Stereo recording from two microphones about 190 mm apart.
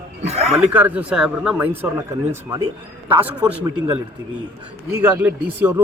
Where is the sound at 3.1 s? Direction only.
10° right (ahead or behind).